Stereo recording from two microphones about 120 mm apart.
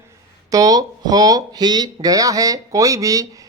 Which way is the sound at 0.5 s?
30° right (ahead or behind).